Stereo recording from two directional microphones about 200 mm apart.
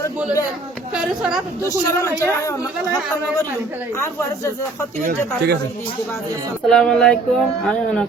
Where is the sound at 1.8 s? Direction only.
15° left (ahead or behind).